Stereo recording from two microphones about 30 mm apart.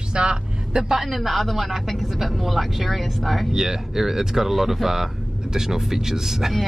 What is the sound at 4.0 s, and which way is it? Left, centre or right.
Speech, centre.